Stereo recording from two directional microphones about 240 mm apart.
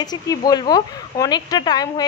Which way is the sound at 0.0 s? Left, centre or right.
Centre.